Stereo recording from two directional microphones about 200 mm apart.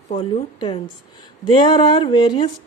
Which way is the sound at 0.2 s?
25° left (ahead or behind).